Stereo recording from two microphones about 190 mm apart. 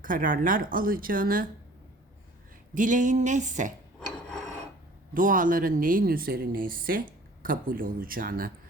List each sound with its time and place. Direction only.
0.0 s speech: 45° right (ahead or behind)
2.7 s a sound: 45° right (ahead or behind)
5.1 s speech: 45° right (ahead or behind)